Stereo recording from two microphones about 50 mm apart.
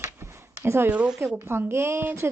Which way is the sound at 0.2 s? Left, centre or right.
Right.